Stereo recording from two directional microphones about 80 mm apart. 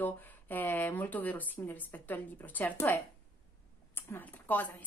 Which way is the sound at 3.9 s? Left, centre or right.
Left.